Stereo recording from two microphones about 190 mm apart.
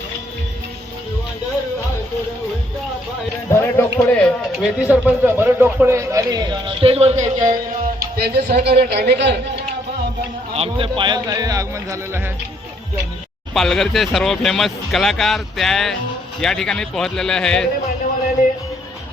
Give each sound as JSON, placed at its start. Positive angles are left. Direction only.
{"t": 3.5, "sound": "speech", "side_deg": 15}
{"t": 4.6, "sound": "a man's voice", "side_deg": -5}
{"t": 8.1, "sound": "a woman's voice", "side_deg": -55}
{"t": 10.5, "sound": "speech", "side_deg": -30}
{"t": 13.5, "sound": "speech", "side_deg": 0}